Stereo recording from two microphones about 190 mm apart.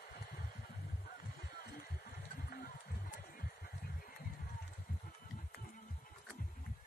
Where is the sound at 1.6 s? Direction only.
50° left (ahead or behind).